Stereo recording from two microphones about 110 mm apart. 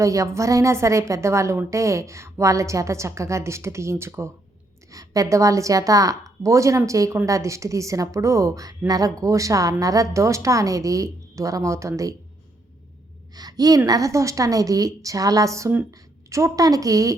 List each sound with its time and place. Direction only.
0.0 s a woman's voice: 30° right (ahead or behind)
13.3 s a woman's voice: 35° right (ahead or behind)